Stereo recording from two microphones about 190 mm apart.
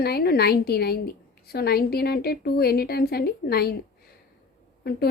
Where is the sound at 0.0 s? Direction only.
55° left (ahead or behind).